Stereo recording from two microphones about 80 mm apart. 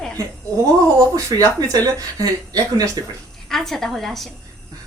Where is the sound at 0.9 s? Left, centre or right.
Right.